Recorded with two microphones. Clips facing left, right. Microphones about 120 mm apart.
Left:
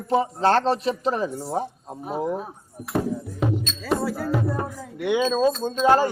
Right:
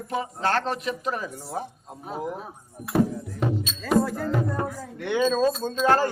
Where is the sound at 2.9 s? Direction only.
Centre (ahead or behind).